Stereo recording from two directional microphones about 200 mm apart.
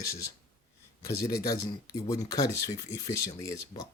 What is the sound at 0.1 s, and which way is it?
Speech, 15° left (ahead or behind).